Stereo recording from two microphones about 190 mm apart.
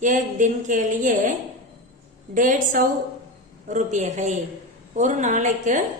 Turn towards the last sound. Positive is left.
turn(degrees=-40)  # may be behind; listen again after turning